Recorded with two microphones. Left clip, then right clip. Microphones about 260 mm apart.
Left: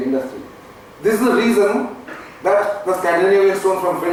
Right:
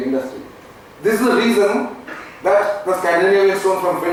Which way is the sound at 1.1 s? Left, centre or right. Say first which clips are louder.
Even; centre.